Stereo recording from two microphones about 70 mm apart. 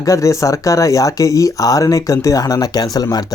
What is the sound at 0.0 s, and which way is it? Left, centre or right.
Speech, left.